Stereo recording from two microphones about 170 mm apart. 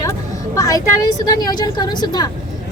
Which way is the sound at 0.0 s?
20° left (ahead or behind).